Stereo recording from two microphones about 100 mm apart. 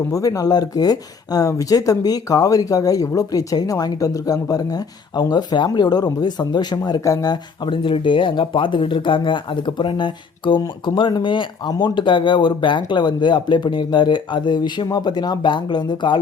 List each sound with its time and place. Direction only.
0.1 s speech: 35° left (ahead or behind)